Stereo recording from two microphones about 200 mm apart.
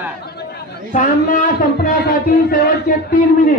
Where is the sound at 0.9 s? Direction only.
40° left (ahead or behind).